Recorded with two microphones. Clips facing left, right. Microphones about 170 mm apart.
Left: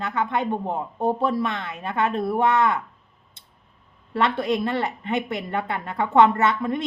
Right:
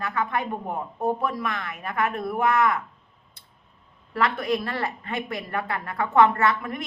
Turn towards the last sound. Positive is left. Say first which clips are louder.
# left 2 dB
turn(degrees=25)  # may be behind; listen again after turning